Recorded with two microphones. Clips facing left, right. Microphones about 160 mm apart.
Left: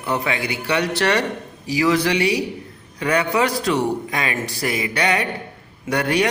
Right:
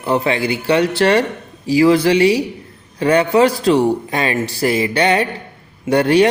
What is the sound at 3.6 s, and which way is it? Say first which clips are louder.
Mantra: right 6 dB; 30° right (ahead or behind).